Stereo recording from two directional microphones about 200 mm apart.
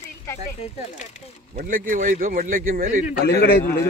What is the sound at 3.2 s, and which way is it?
Speech, 55° left (ahead or behind).